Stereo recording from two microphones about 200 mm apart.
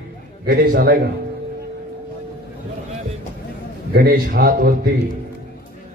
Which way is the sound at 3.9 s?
50° right (ahead or behind).